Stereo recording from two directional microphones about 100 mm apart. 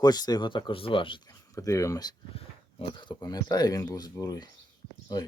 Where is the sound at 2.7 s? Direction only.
55° left (ahead or behind).